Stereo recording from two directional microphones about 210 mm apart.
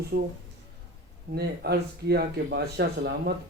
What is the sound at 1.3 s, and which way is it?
Speech, 50° right (ahead or behind).